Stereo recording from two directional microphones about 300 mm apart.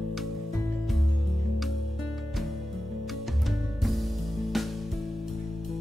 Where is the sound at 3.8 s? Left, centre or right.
Centre.